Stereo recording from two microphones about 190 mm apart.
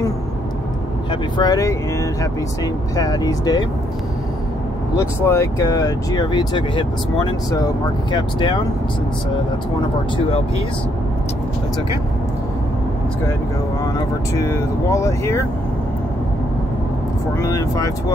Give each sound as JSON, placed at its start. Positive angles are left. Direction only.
{"t": 1.4, "sound": "speech", "side_deg": 20}
{"t": 4.9, "sound": "speech", "side_deg": 15}
{"t": 8.1, "sound": "speech", "side_deg": 25}
{"t": 13.9, "sound": "speech", "side_deg": 15}
{"t": 17.4, "sound": "speech", "side_deg": 15}